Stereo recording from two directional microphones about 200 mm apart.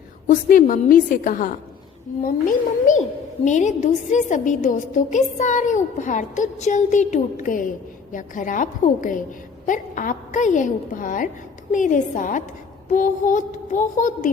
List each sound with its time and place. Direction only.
0.3 s a woman's voice: 45° left (ahead or behind)